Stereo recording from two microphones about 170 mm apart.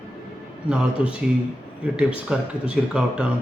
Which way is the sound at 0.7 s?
5° right (ahead or behind).